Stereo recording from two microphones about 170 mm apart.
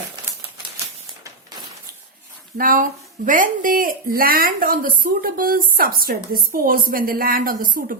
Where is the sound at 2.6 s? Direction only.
55° right (ahead or behind).